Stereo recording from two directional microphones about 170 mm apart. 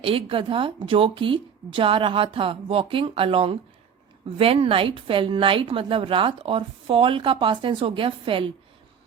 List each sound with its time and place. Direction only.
0.0 s a woman's voice: 30° right (ahead or behind)